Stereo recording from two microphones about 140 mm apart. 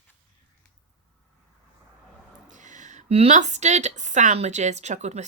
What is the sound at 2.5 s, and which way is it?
A woman's voice, 60° right (ahead or behind).